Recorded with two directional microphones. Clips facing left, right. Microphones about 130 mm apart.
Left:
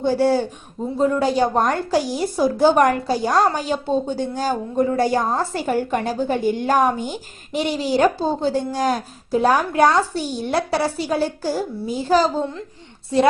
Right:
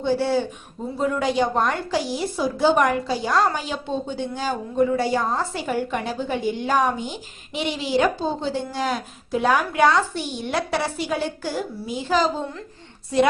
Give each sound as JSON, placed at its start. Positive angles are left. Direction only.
{"t": 0.0, "sound": "a woman's voice", "side_deg": 45}